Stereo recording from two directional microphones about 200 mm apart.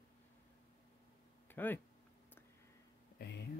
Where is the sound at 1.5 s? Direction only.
10° left (ahead or behind).